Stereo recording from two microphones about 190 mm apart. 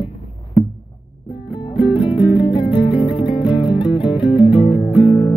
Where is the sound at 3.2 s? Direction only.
5° right (ahead or behind).